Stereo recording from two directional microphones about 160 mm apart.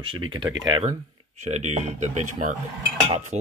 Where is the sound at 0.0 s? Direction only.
30° right (ahead or behind).